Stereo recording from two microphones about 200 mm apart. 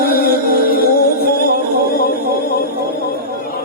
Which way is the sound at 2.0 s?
50° left (ahead or behind).